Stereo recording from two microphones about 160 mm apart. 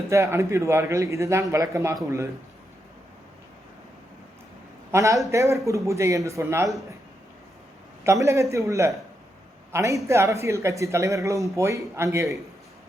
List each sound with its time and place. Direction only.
0.1 s a man's voice: 20° right (ahead or behind)
4.9 s speech: 20° right (ahead or behind)
8.0 s a man's voice: 20° right (ahead or behind)